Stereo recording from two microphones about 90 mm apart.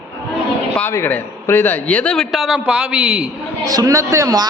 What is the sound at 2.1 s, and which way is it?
A man's voice, centre (ahead or behind).